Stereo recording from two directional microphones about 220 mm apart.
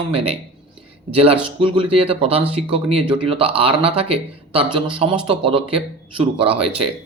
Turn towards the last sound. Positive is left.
turn(degrees=-25)  # may be behind; listen again after turning